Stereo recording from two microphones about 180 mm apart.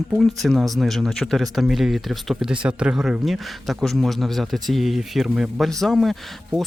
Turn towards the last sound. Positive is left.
turn(degrees=0)  # may be behind; listen again after turning